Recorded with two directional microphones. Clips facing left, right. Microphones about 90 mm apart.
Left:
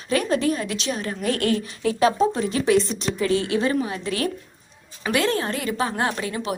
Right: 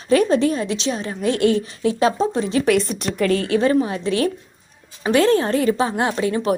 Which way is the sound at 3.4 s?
35° right (ahead or behind).